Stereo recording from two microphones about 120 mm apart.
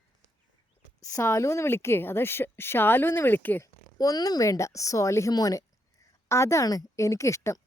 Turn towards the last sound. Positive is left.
turn(degrees=25)  # may be behind; listen again after turning